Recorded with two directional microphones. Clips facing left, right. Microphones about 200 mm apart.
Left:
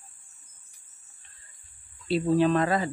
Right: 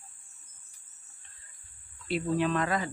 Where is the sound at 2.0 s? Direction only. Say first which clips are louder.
Left 6 dB; 30° left (ahead or behind).